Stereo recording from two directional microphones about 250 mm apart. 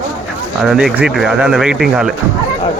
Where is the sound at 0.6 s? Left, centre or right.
Centre.